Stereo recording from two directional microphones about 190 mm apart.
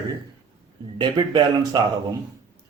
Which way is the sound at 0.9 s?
25° right (ahead or behind).